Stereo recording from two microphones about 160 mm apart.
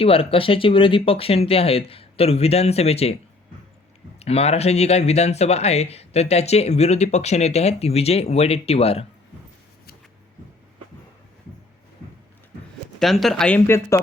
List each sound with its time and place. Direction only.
0.0 s speech: 35° left (ahead or behind)
4.2 s speech: 40° left (ahead or behind)
13.0 s speech: centre (ahead or behind)
13.7 s speech: 15° left (ahead or behind)